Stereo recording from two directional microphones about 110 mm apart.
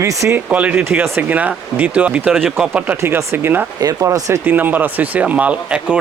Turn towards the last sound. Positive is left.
turn(degrees=-10)  # may be behind; listen again after turning